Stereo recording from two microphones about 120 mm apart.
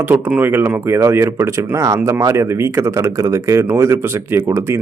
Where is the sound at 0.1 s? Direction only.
15° right (ahead or behind).